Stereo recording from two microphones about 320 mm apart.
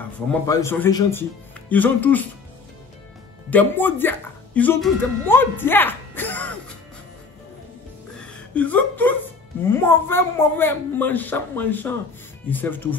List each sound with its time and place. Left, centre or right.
0.3 s speech: centre
3.4 s speech: centre
8.5 s speech: centre